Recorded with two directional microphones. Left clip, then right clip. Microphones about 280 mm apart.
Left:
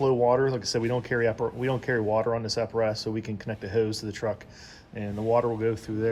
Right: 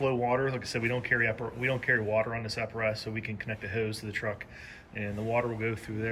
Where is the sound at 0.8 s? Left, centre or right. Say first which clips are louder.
Left 2 dB; left.